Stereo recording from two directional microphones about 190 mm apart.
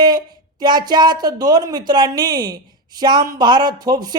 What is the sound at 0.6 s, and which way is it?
Speech, 20° right (ahead or behind).